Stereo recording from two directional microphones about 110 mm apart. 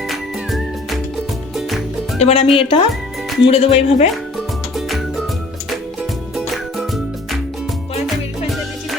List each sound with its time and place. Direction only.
0.1 s music: centre (ahead or behind)
2.1 s speech: 70° left (ahead or behind)
4.4 s music: centre (ahead or behind)
6.5 s music: centre (ahead or behind)